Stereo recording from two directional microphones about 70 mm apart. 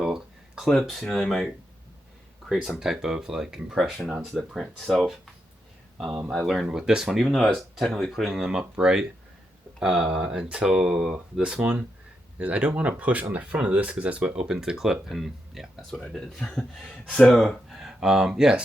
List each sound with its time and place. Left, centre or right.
0.0 s a sound: centre
0.8 s speech: centre
2.6 s speech: centre
6.3 s speech: centre
14.4 s speech: centre
16.0 s speech: centre